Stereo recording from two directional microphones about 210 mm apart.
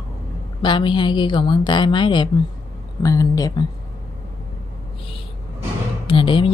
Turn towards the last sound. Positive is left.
turn(degrees=25)  # may be behind; listen again after turning